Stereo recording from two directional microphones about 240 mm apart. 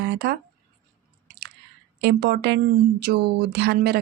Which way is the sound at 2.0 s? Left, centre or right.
Right.